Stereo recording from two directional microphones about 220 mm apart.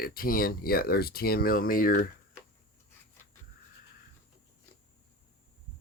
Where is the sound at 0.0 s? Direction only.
40° left (ahead or behind).